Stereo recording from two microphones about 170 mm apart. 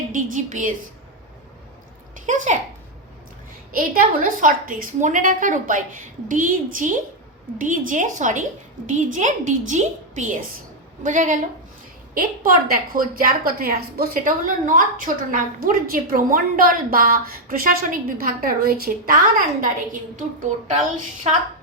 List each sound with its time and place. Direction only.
0.1 s a sound: 50° right (ahead or behind)
2.2 s a woman's voice: 45° right (ahead or behind)
3.8 s a woman's voice: 55° right (ahead or behind)
12.1 s a woman's voice: 60° right (ahead or behind)